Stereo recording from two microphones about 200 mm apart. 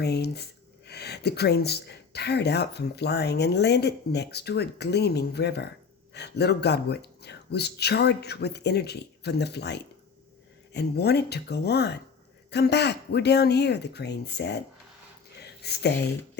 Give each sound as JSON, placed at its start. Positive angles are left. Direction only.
{"t": 0.0, "sound": "speech", "side_deg": 55}
{"t": 15.6, "sound": "speech", "side_deg": 55}